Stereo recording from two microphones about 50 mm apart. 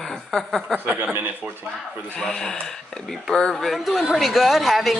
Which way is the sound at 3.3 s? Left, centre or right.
Centre.